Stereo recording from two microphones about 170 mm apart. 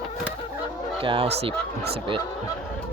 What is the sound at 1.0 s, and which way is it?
Speech, 35° right (ahead or behind).